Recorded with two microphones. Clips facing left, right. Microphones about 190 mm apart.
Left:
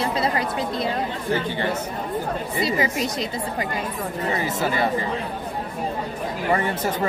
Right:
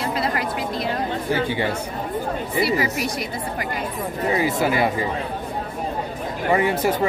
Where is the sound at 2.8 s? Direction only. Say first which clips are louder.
Even; 25° left (ahead or behind).